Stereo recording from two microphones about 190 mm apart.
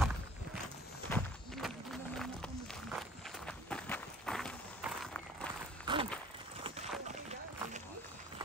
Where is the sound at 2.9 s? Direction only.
5° left (ahead or behind).